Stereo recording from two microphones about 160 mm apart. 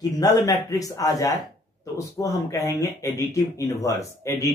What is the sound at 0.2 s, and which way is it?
Speech, 20° left (ahead or behind).